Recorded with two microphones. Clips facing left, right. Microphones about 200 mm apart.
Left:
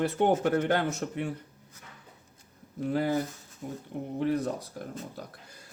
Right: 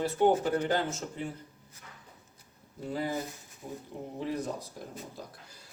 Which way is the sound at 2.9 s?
65° left (ahead or behind).